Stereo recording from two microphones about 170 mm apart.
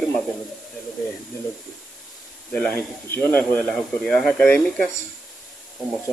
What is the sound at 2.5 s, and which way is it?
Speech, 5° left (ahead or behind).